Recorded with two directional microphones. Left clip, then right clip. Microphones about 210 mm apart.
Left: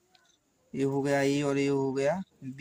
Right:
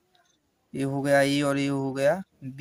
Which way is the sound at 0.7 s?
45° right (ahead or behind).